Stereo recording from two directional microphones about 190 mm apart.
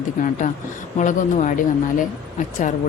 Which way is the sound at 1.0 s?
40° left (ahead or behind).